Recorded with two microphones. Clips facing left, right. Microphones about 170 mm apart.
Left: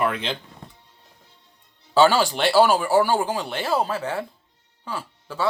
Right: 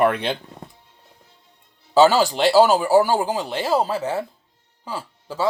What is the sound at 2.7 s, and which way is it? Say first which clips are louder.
Speech: right 3 dB; 10° right (ahead or behind).